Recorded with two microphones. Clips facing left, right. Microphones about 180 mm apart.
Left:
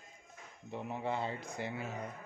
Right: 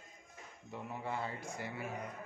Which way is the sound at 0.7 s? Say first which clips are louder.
Left 4 dB; 20° left (ahead or behind).